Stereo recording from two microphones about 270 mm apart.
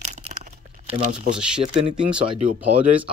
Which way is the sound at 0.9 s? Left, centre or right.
Right.